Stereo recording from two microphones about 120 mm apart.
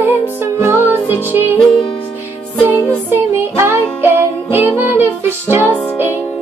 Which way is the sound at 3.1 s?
20° right (ahead or behind).